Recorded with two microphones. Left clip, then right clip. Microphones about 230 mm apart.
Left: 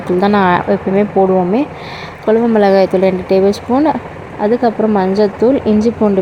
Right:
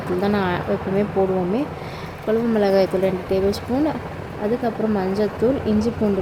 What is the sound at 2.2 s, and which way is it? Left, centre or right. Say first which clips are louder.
Speech: left 9 dB; centre.